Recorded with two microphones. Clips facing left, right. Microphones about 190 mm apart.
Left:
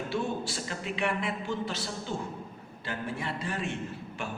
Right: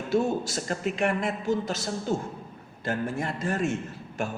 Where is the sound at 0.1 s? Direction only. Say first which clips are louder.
Right 10 dB; 45° right (ahead or behind).